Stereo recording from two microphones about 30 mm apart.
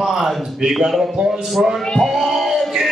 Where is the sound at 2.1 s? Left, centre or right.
Centre.